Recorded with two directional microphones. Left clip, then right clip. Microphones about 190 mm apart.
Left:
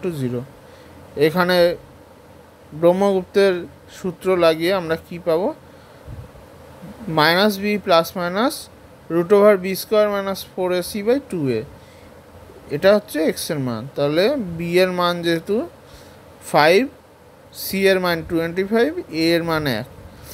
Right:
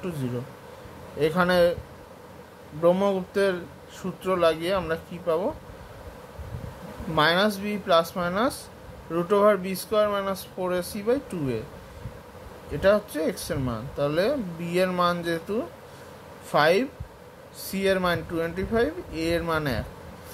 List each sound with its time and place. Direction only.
1.2 s speech: 35° left (ahead or behind)
2.8 s speech: 35° left (ahead or behind)
7.2 s speech: 40° left (ahead or behind)
12.7 s speech: 35° left (ahead or behind)